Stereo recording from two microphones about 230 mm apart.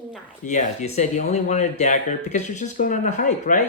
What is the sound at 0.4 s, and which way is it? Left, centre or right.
Speech, left.